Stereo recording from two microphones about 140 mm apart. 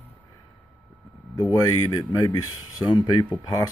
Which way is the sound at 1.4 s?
20° left (ahead or behind).